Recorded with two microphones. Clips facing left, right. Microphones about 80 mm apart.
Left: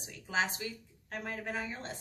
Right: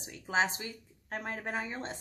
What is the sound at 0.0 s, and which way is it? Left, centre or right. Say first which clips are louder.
A woman's voice: right 3 dB; right.